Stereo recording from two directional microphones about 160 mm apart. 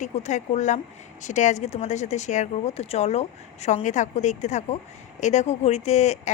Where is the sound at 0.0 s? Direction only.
45° left (ahead or behind).